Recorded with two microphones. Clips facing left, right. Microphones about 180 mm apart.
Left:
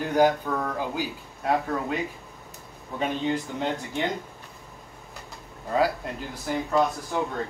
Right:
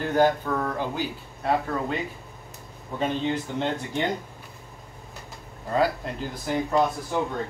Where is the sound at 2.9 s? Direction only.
10° left (ahead or behind).